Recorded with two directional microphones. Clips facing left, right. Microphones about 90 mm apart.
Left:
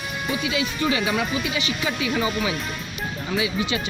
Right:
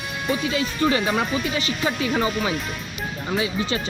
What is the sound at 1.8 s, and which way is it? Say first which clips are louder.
Speech: right 3 dB; 40° right (ahead or behind).